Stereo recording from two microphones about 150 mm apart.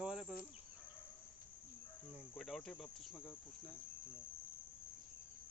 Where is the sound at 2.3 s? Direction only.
Centre (ahead or behind).